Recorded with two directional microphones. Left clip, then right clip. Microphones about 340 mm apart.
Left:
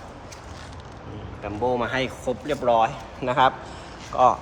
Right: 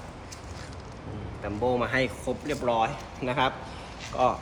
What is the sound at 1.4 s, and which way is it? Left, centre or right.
A man's voice, centre.